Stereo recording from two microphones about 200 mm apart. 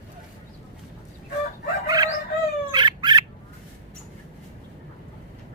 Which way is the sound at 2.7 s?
20° right (ahead or behind).